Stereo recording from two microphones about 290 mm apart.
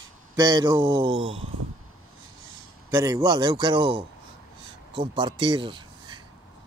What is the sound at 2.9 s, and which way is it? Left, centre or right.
A man's voice, centre.